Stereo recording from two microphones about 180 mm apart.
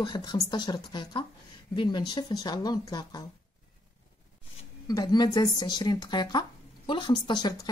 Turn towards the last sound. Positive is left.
turn(degrees=20)  # may be behind; listen again after turning